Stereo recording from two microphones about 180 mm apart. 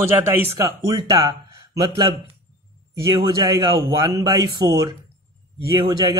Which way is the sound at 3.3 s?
20° right (ahead or behind).